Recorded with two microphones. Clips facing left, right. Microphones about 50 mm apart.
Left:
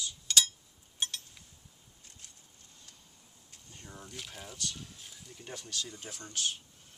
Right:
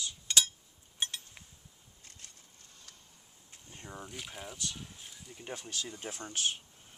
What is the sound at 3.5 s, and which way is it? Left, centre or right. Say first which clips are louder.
Speech: right 4 dB; right.